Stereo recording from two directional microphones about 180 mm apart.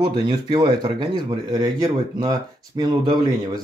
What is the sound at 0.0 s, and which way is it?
Speech, 25° right (ahead or behind).